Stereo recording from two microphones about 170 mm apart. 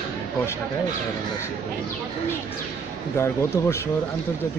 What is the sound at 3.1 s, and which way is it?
Speech, 15° left (ahead or behind).